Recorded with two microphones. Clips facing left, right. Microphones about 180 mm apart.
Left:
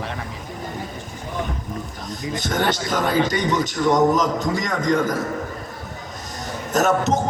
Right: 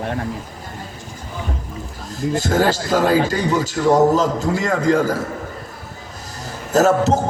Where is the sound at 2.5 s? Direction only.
35° right (ahead or behind).